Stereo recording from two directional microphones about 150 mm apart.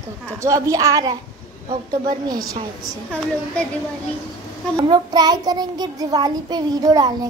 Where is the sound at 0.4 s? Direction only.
20° right (ahead or behind).